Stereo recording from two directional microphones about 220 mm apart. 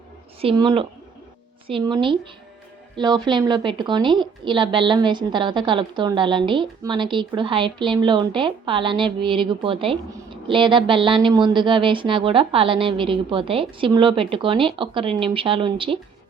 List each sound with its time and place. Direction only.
0.4 s a woman's voice: 25° right (ahead or behind)